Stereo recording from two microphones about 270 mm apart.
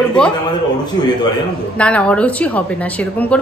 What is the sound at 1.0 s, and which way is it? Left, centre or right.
Speech, centre.